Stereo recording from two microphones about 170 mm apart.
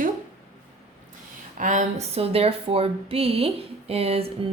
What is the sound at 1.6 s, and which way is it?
Speech, 45° right (ahead or behind).